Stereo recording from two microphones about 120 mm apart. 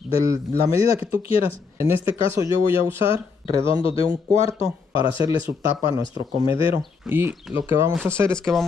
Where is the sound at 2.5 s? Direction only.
20° right (ahead or behind).